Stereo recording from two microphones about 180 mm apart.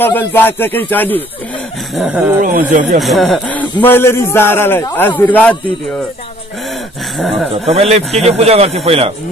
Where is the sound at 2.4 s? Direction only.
45° right (ahead or behind).